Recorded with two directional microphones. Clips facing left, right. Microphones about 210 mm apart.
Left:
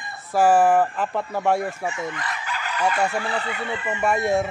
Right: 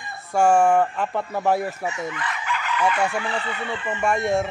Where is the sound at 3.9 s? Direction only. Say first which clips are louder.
Even; 5° left (ahead or behind).